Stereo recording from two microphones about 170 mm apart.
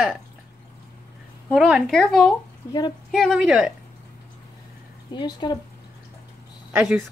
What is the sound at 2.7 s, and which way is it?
Speech, 25° left (ahead or behind).